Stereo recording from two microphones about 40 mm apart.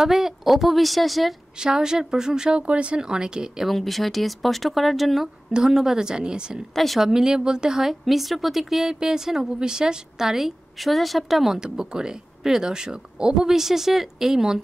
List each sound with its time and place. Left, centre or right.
0.0 s speech: centre
1.6 s a woman's voice: centre
3.6 s speech: centre; by 6.6 s right
6.7 s speech: centre
7.0 s speech: centre
8.0 s speech: centre